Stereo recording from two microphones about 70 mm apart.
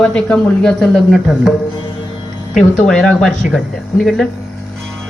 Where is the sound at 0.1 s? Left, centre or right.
Centre.